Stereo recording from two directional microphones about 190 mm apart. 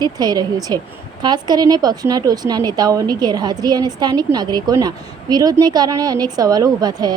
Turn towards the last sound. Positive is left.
turn(degrees=-20)  # may be behind; listen again after turning